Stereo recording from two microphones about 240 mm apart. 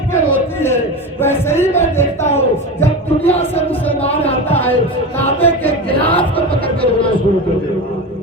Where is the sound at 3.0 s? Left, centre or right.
Left.